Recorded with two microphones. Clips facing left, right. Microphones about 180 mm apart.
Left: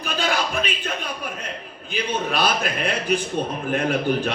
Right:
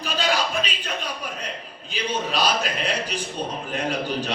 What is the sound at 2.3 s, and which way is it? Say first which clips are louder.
A man's voice: left 1 dB; 55° left (ahead or behind).